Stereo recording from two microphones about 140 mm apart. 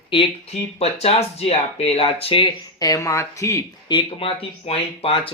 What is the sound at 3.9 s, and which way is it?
Speech, 40° left (ahead or behind).